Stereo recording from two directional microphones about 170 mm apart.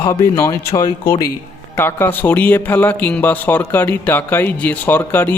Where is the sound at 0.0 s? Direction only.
15° left (ahead or behind).